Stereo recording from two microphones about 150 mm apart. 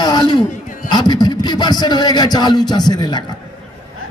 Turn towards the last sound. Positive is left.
turn(degrees=30)  # may be behind; listen again after turning